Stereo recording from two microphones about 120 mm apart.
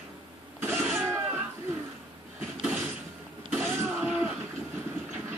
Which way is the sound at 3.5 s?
15° right (ahead or behind).